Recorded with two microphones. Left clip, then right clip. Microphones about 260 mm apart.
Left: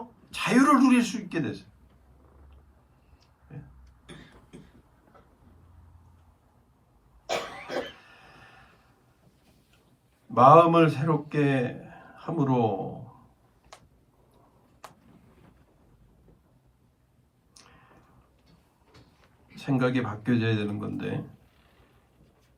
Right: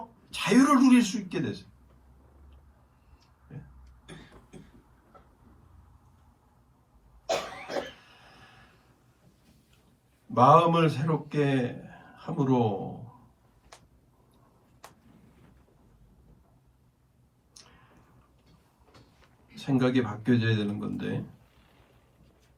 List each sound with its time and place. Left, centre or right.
0.3 s speech: left
8.0 s a sound: left
10.3 s a man's voice: left
19.5 s speech: left